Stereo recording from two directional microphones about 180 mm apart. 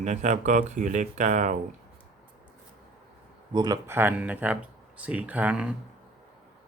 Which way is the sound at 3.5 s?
20° right (ahead or behind).